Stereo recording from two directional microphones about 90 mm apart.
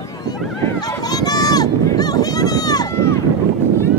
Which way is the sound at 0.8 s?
45° left (ahead or behind).